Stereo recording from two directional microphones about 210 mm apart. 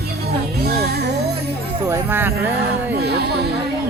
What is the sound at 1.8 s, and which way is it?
Music, 10° right (ahead or behind).